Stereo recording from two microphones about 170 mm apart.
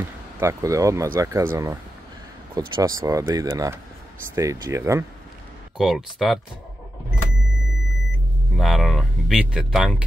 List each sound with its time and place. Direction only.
0.4 s speech: 15° right (ahead or behind)
5.8 s speech: centre (ahead or behind)
8.5 s speech: centre (ahead or behind)